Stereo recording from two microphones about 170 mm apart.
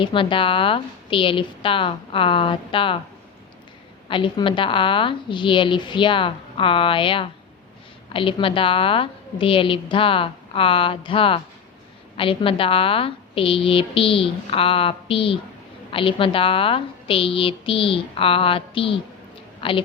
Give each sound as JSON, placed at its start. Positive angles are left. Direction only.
{"t": 0.0, "sound": "a woman's voice", "side_deg": 30}
{"t": 4.1, "sound": "a woman's voice", "side_deg": 30}